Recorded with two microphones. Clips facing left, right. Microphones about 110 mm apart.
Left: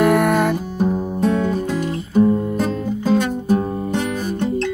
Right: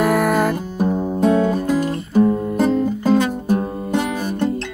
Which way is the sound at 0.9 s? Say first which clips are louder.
Right 2 dB; 20° right (ahead or behind).